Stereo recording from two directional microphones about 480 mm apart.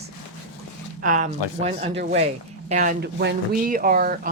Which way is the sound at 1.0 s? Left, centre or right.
Centre.